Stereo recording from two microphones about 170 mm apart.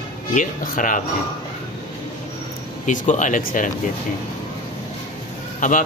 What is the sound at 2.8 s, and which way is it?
Speech, 45° left (ahead or behind).